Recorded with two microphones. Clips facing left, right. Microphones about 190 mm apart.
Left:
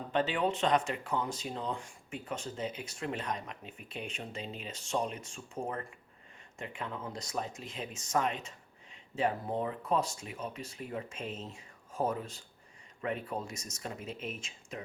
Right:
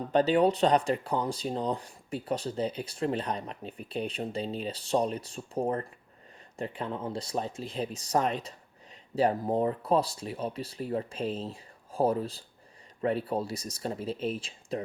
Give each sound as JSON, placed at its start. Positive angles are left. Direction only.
{"t": 0.1, "sound": "speech", "side_deg": -40}